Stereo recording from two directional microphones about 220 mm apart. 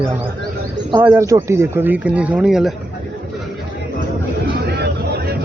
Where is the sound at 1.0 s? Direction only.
10° right (ahead or behind).